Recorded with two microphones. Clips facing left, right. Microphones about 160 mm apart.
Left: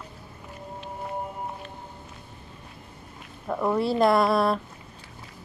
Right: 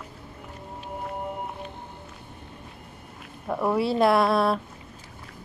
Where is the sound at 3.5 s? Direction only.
5° right (ahead or behind).